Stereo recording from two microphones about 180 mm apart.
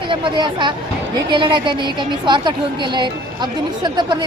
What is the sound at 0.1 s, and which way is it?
A woman's voice, 25° right (ahead or behind).